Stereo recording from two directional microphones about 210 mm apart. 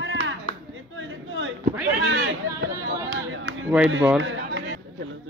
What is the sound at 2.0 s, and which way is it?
Speech, 75° right (ahead or behind).